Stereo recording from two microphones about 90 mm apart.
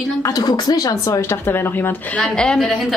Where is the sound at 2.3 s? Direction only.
5° left (ahead or behind).